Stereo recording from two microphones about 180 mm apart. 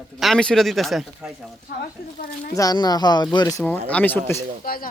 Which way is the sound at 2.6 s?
20° left (ahead or behind).